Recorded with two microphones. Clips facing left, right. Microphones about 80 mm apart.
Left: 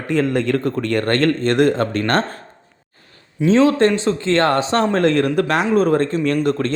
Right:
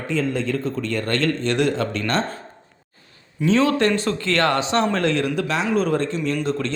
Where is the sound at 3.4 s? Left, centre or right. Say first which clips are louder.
Left 4 dB; left.